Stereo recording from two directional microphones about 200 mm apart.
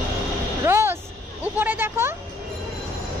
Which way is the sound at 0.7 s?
10° right (ahead or behind).